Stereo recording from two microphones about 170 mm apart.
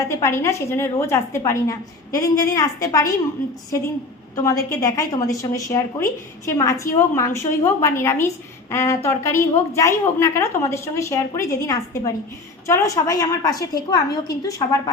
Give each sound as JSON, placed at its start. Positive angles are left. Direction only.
{"t": 0.0, "sound": "a woman's voice", "side_deg": 15}
{"t": 4.7, "sound": "a woman's voice", "side_deg": 20}